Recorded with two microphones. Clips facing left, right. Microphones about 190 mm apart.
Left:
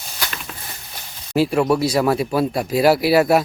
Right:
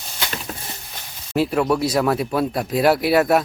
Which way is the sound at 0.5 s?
40° right (ahead or behind).